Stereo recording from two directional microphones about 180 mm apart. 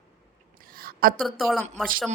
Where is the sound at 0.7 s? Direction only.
55° right (ahead or behind).